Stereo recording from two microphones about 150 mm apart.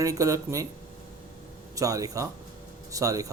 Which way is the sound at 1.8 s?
25° right (ahead or behind).